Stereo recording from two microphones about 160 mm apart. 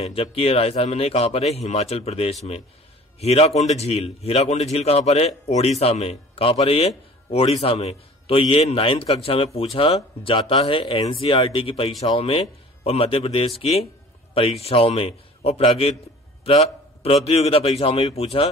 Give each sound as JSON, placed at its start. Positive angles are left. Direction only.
{"t": 0.0, "sound": "a man's voice", "side_deg": 40}